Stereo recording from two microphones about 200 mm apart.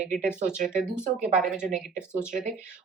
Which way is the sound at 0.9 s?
5° right (ahead or behind).